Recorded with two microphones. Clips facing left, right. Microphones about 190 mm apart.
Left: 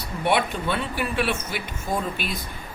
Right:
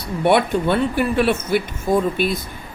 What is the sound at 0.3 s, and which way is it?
Speech, 55° right (ahead or behind).